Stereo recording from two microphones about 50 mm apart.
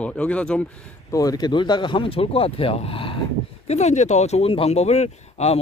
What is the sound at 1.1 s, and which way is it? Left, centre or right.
Speech, left.